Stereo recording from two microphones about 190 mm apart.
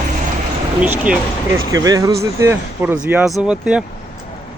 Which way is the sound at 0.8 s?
5° right (ahead or behind).